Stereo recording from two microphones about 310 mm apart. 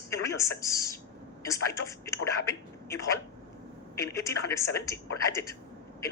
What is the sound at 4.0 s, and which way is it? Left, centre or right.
A woman's voice, centre.